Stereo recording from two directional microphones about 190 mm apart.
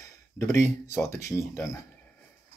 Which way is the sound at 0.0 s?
15° left (ahead or behind).